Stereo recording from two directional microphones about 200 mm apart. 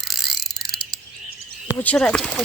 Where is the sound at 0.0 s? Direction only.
Centre (ahead or behind).